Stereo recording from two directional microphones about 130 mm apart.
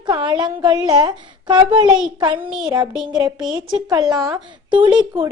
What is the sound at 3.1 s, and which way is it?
Speech, 30° right (ahead or behind).